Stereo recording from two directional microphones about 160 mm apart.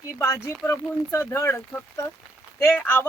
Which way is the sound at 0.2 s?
15° left (ahead or behind).